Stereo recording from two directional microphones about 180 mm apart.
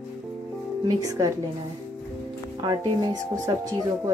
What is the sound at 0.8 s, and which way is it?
Speech, 20° right (ahead or behind).